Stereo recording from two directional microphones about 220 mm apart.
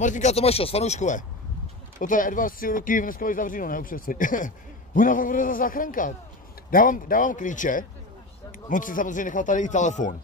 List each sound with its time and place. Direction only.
0.0 s speech: 35° left (ahead or behind)